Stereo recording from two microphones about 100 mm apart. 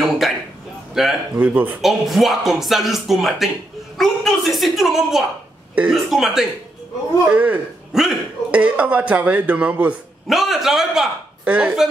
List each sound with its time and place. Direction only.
0.2 s a sound: centre (ahead or behind)
0.9 s speech: 5° right (ahead or behind)
1.4 s speech: 15° right (ahead or behind)
1.8 s speech: centre (ahead or behind)
7.2 s speech: 15° right (ahead or behind)
7.9 s speech: 5° right (ahead or behind)
10.2 s a man's voice: centre (ahead or behind)